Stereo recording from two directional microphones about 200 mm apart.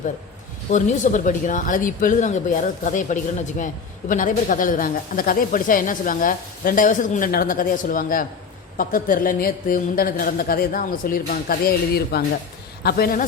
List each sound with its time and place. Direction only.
0.7 s speech: 40° left (ahead or behind)